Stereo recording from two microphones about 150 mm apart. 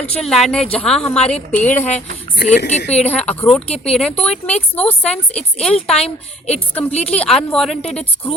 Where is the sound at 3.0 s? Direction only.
10° left (ahead or behind).